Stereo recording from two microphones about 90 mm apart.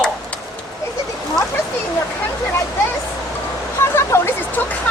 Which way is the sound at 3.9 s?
25° left (ahead or behind).